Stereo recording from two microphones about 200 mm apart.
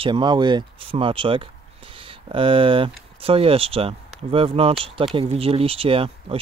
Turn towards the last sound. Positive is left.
turn(degrees=-25)  # may be behind; listen again after turning